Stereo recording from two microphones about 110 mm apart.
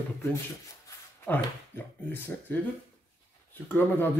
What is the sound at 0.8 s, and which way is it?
Shuffling cards, 20° left (ahead or behind).